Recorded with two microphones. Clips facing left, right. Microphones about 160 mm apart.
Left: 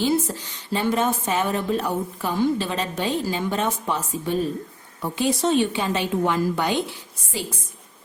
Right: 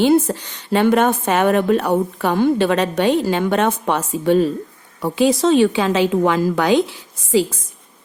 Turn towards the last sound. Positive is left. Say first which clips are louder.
# right 14 dB
turn(degrees=-90)